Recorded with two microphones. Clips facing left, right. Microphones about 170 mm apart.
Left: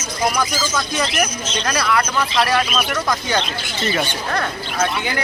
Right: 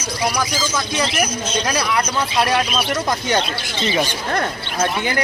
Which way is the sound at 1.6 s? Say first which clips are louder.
Left 4 dB; 15° right (ahead or behind).